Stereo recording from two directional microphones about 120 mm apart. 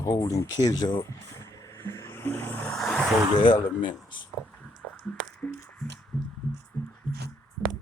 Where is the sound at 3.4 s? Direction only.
45° left (ahead or behind).